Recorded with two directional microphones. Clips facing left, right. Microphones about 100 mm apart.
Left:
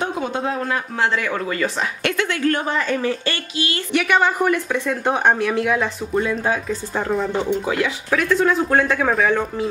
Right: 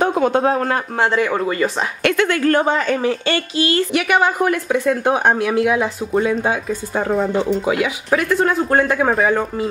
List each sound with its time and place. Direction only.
0.0 s speech: 50° right (ahead or behind)
1.1 s speech: 25° right (ahead or behind)
2.0 s a woman's voice: 55° right (ahead or behind)
2.6 s speech: 20° right (ahead or behind)
3.3 s speech: 40° right (ahead or behind)
3.9 s speech: 10° right (ahead or behind)